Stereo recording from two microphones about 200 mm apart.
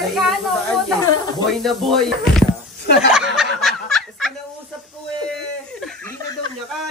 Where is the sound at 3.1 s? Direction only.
Centre (ahead or behind).